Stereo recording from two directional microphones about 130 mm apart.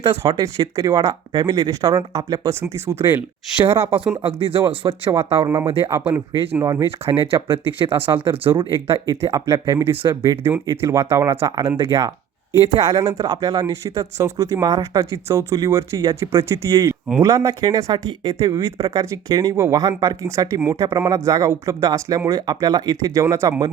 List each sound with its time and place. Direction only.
0.2 s speech: 25° right (ahead or behind)
4.2 s speech: 45° right (ahead or behind)
5.9 s speech: 15° right (ahead or behind)
7.0 s speech: 45° right (ahead or behind)
9.3 s speech: 30° right (ahead or behind)
12.6 s speech: 50° right (ahead or behind)
12.9 s speech: 25° right (ahead or behind)